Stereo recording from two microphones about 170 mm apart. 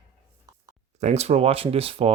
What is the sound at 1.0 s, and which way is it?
Speech, 40° right (ahead or behind).